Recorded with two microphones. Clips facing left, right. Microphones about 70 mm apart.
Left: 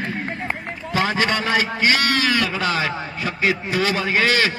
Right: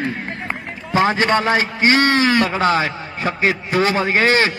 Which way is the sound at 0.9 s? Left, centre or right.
Right.